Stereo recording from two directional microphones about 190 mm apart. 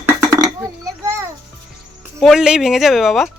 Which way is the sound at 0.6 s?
15° right (ahead or behind).